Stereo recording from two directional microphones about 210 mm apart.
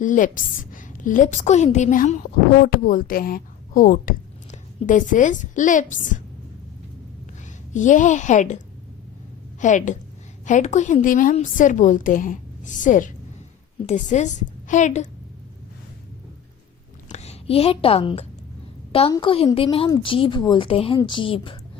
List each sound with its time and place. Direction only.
0.0 s a woman's voice: 40° left (ahead or behind)
7.7 s a woman's voice: 35° left (ahead or behind)
17.1 s a woman's voice: 30° left (ahead or behind)